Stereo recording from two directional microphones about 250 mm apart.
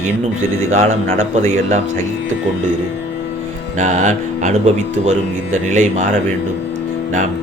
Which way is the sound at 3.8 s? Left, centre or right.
Right.